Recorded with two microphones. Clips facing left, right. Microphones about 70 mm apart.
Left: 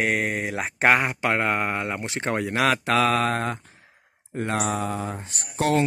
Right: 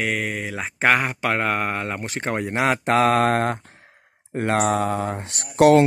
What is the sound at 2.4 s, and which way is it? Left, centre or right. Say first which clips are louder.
Speech: right 1 dB; right.